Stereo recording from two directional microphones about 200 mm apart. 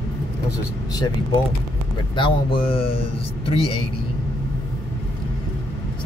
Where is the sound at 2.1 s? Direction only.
25° left (ahead or behind).